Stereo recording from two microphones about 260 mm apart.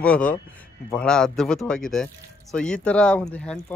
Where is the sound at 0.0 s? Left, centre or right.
Centre.